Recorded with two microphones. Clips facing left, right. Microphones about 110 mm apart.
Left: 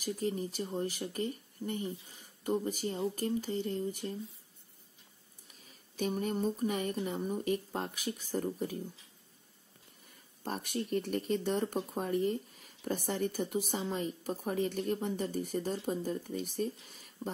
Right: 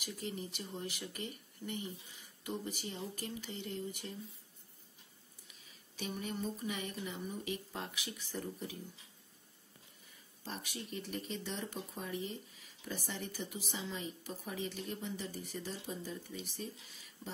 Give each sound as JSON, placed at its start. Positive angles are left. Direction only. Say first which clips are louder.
{"t": 0.0, "sound": "speech", "louder": "left 8 dB", "side_deg": 40}
{"t": 5.5, "sound": "speech", "louder": "left 5 dB", "side_deg": 45}
{"t": 10.0, "sound": "speech", "louder": "left 8 dB", "side_deg": 50}